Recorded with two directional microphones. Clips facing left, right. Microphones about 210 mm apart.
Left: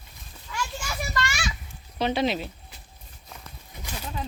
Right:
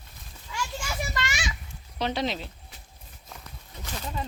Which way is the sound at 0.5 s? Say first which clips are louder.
Left 1 dB; 20° right (ahead or behind).